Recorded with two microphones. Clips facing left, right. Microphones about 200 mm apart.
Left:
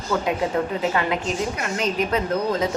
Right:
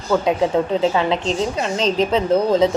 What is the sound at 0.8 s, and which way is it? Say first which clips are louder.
A woman's voice: right 5 dB; 30° right (ahead or behind).